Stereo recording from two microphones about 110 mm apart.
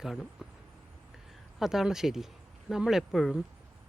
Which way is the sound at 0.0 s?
Centre (ahead or behind).